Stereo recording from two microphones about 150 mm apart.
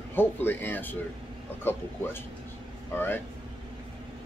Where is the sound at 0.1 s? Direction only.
15° left (ahead or behind).